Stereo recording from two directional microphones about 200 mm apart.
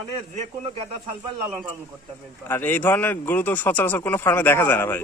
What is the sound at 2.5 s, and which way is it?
A man's voice, 10° left (ahead or behind).